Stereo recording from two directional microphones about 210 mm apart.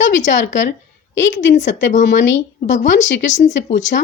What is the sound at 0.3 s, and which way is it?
Speech, 60° left (ahead or behind).